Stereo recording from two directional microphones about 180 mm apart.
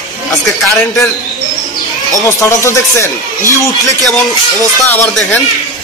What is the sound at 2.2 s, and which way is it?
Speech, 15° left (ahead or behind).